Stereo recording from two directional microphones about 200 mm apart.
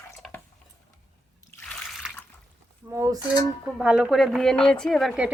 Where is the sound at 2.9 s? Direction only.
15° right (ahead or behind).